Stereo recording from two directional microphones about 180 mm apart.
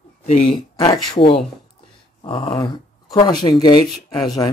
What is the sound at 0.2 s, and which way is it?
Speech, 35° left (ahead or behind).